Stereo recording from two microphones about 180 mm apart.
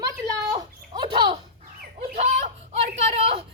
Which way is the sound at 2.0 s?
35° right (ahead or behind).